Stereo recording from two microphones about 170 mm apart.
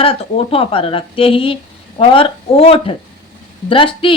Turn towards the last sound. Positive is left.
turn(degrees=30)  # may be behind; listen again after turning